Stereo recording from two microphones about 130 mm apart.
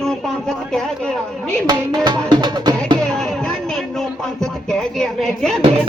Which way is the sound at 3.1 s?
5° left (ahead or behind).